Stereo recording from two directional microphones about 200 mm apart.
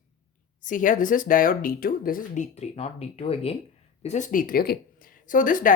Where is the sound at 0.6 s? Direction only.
40° left (ahead or behind).